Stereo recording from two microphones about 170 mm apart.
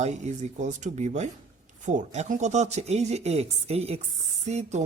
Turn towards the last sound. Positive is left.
turn(degrees=-40)  # may be behind; listen again after turning